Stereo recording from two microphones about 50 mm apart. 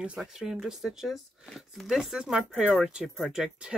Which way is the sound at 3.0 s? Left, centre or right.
Centre.